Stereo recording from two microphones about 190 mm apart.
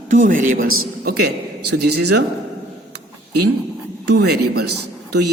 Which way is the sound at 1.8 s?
55° right (ahead or behind).